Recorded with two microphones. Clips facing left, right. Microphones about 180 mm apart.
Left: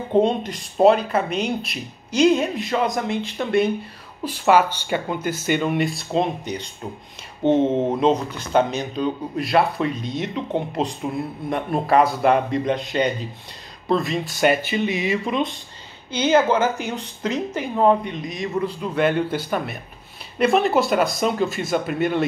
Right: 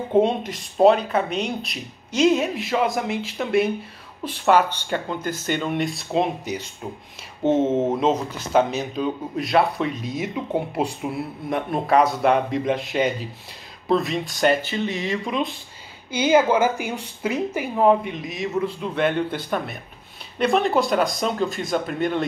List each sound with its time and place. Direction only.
0.1 s speech: 5° right (ahead or behind)
15.3 s speech: centre (ahead or behind)